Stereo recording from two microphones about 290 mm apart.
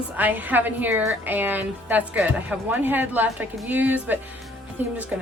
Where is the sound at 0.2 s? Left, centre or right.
Centre.